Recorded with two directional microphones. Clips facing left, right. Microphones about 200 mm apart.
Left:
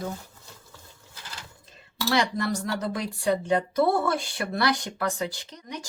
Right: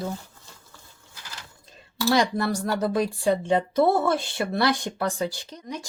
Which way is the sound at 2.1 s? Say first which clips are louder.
Right 3 dB; 30° right (ahead or behind).